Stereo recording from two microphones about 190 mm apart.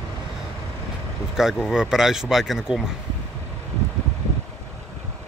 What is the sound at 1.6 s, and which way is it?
Speech, 5° right (ahead or behind).